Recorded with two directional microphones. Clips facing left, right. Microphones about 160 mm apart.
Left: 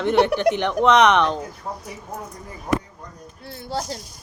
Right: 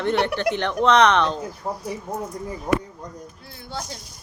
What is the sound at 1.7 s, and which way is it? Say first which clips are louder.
Speech: right 5 dB; 25° right (ahead or behind).